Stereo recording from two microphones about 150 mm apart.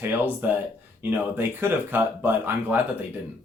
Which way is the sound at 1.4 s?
15° right (ahead or behind).